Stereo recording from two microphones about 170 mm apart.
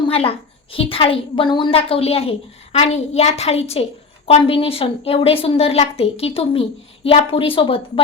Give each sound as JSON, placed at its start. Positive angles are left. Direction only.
{"t": 0.1, "sound": "a woman's voice", "side_deg": 35}